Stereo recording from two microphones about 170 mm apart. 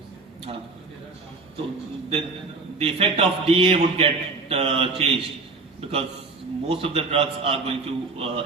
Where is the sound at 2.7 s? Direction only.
35° right (ahead or behind).